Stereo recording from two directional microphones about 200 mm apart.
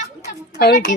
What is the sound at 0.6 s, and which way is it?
Speech, 50° left (ahead or behind).